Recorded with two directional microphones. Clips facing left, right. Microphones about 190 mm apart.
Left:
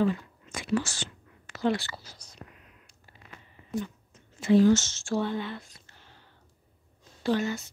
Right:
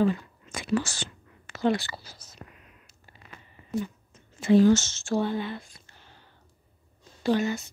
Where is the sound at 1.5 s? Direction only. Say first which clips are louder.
Right 2 dB; 20° right (ahead or behind).